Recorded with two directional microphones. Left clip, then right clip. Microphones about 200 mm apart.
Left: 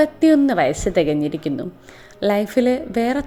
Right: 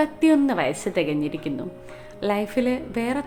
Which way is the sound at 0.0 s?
15° left (ahead or behind).